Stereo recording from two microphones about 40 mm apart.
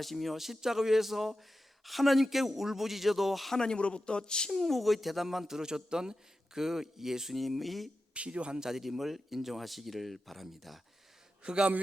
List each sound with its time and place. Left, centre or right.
0.0 s a man's voice: centre
3.5 s speech: centre
4.5 s a man's voice: centre
8.1 s speech: right
8.5 s speech: centre
11.4 s a man's voice: right